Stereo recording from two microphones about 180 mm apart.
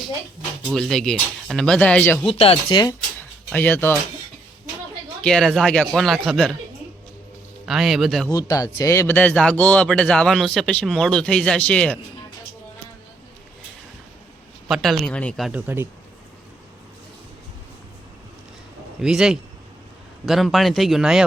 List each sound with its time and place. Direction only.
0.7 s speech: centre (ahead or behind)
2.2 s speech: 30° left (ahead or behind)
3.2 s a sound: 10° left (ahead or behind)
5.2 s speech: 5° left (ahead or behind)
7.7 s speech: centre (ahead or behind)
8.3 s speech: 20° left (ahead or behind)
14.7 s speech: centre (ahead or behind)
19.0 s speech: 5° right (ahead or behind)